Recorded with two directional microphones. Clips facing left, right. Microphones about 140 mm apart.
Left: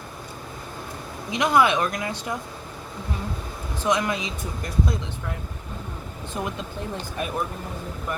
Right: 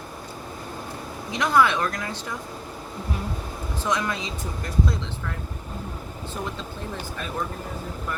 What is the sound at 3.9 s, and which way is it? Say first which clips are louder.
Speech: left 3 dB; 15° left (ahead or behind).